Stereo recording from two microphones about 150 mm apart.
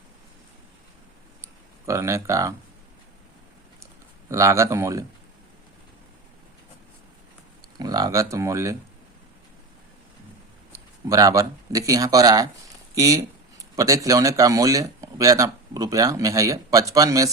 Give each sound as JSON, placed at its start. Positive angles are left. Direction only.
{"t": 1.9, "sound": "speech", "side_deg": -20}
{"t": 4.3, "sound": "speech", "side_deg": -20}
{"t": 7.8, "sound": "speech", "side_deg": -25}
{"t": 10.7, "sound": "speech", "side_deg": -20}